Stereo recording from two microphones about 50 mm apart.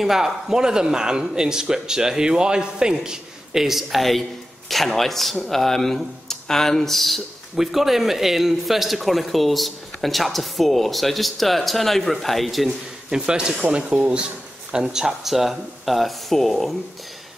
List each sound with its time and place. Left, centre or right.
0.0 s a man's voice: centre
12.6 s a man's voice: centre
13.7 s speech: right
14.7 s speech: centre